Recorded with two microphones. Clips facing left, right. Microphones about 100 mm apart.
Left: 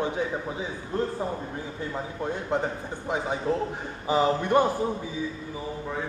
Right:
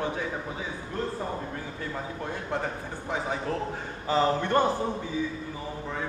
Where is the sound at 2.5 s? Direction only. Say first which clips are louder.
Left 3 dB; 20° left (ahead or behind).